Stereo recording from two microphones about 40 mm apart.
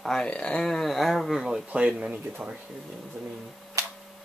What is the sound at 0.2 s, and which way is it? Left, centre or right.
Speech, left.